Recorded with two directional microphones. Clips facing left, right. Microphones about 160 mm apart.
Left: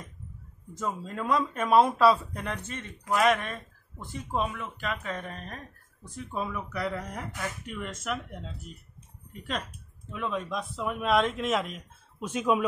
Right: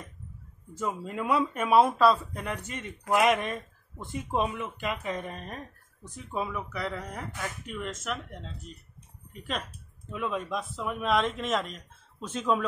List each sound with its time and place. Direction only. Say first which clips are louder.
0.7 s speech: right 1 dB; 5° right (ahead or behind)
2.6 s speech: right 1 dB; 15° right (ahead or behind); by 8.7 s 5° left (ahead or behind)
10.1 s speech: even; 5° right (ahead or behind); by 12.6 s 15° left (ahead or behind)